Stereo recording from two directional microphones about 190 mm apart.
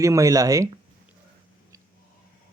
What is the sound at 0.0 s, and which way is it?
Speech, 15° right (ahead or behind).